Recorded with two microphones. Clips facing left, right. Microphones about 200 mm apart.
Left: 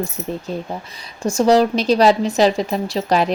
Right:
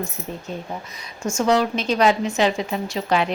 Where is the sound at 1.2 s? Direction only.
35° left (ahead or behind).